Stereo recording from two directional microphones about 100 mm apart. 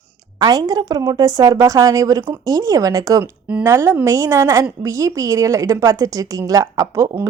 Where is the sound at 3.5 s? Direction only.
25° right (ahead or behind).